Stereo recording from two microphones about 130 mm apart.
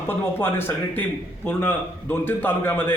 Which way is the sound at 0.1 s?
15° left (ahead or behind).